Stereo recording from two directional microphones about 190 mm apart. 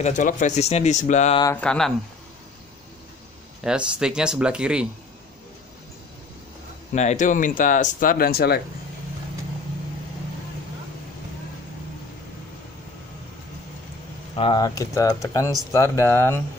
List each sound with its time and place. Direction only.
0.0 s speech: 40° left (ahead or behind)
1.6 s speech: 5° left (ahead or behind)
3.6 s speech: 5° right (ahead or behind)
6.9 s speech: 40° left (ahead or behind); by 8.6 s 55° left (ahead or behind)
14.3 s speech: 25° left (ahead or behind)